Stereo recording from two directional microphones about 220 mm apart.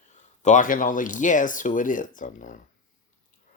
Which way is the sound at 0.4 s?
35° left (ahead or behind).